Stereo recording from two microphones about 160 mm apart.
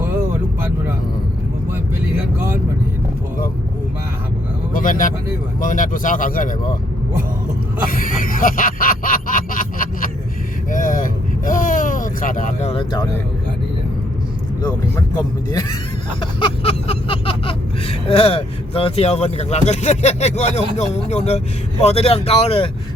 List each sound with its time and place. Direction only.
4.7 s vehicle: 55° left (ahead or behind)
5.5 s speech: 55° left (ahead or behind)
7.9 s a sound: 60° left (ahead or behind)
10.7 s vehicle: 55° left (ahead or behind)
12.7 s speech: 30° left (ahead or behind)
16.2 s a sound: 35° left (ahead or behind)
21.2 s speech: 45° left (ahead or behind)